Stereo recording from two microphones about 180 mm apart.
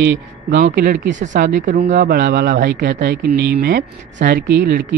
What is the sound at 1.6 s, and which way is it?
Speech, 45° right (ahead or behind).